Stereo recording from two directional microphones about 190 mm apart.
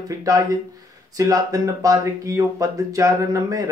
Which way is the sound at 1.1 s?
15° right (ahead or behind).